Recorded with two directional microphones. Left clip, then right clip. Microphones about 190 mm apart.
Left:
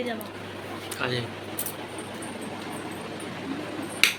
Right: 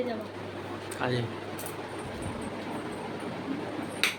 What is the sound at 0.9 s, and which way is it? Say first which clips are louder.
Speech: left 2 dB; 35° right (ahead or behind).